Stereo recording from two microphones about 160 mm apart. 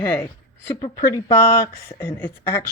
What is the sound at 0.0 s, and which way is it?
Speech, 15° left (ahead or behind).